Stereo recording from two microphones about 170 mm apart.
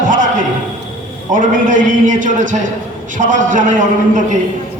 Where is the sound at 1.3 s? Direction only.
50° right (ahead or behind).